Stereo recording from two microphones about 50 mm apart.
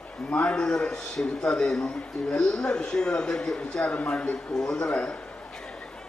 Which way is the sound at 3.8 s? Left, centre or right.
Left.